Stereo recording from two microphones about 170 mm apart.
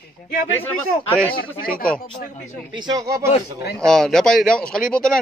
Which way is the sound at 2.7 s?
25° right (ahead or behind).